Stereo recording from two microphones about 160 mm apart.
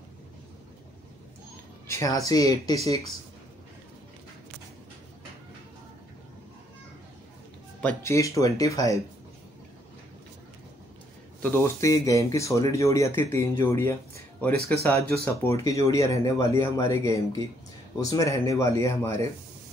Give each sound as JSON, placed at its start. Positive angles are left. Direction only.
{"t": 1.9, "sound": "speech", "side_deg": 20}
{"t": 7.8, "sound": "speech", "side_deg": 20}
{"t": 11.4, "sound": "speech", "side_deg": 15}